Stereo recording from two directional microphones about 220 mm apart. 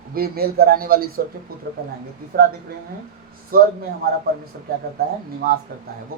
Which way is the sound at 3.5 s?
40° right (ahead or behind).